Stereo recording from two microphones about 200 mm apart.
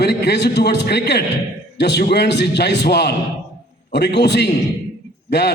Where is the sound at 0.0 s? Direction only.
55° left (ahead or behind).